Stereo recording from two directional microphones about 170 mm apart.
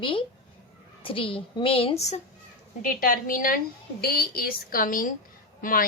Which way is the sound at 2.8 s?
55° left (ahead or behind).